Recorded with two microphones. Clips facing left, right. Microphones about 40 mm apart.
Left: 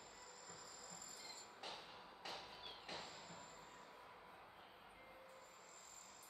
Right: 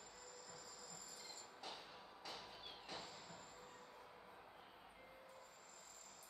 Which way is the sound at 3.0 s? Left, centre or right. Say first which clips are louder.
Even; centre.